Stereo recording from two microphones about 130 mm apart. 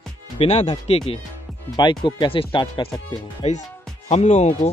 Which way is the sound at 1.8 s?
35° left (ahead or behind).